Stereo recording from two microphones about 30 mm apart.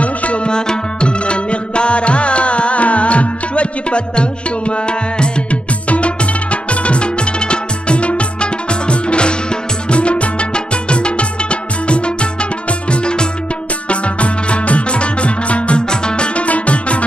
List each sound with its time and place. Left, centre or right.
0.0 s music: left
0.5 s music: left
5.9 s music: left
15.9 s music: left
16.3 s music: left